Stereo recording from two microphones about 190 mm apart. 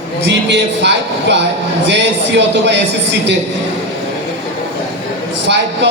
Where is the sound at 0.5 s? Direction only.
65° right (ahead or behind).